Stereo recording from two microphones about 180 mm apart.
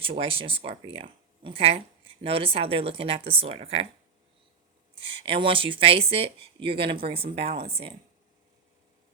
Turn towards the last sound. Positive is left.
turn(degrees=-30)  # may be behind; listen again after turning